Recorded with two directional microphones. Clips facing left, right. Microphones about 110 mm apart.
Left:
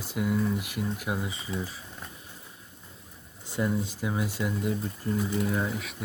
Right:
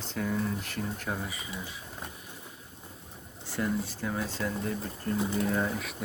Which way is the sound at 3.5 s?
20° left (ahead or behind).